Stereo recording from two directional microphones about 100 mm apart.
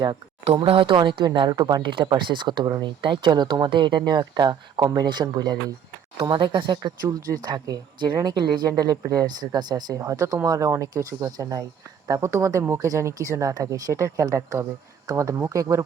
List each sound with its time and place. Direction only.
0.0 s speech: 45° right (ahead or behind)
0.7 s speech: 60° right (ahead or behind); by 5.5 s 40° right (ahead or behind)
6.3 s speech: 55° right (ahead or behind); by 15.8 s 35° right (ahead or behind)